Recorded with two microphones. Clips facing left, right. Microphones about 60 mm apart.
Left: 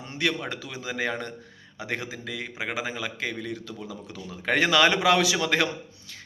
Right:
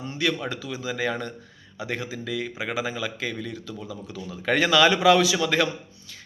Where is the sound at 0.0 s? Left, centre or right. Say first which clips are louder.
Right 2 dB; left.